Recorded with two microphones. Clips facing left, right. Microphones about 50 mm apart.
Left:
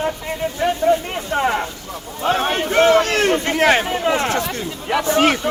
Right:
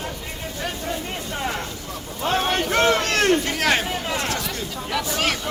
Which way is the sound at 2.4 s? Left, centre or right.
Centre.